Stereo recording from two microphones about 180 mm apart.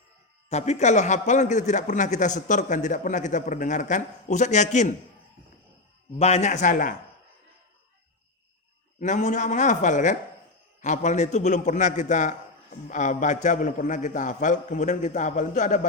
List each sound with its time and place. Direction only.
0.5 s a man's voice: 40° left (ahead or behind)
6.1 s a man's voice: 35° left (ahead or behind)
9.0 s a man's voice: 40° left (ahead or behind)